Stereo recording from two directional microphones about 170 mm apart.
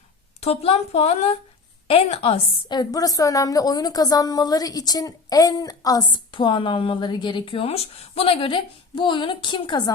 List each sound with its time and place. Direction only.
0.3 s a woman's voice: 35° left (ahead or behind)